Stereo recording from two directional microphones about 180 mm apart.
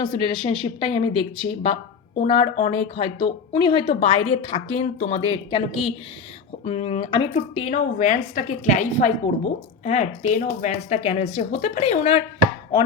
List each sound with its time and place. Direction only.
0.0 s a woman's voice: 25° left (ahead or behind)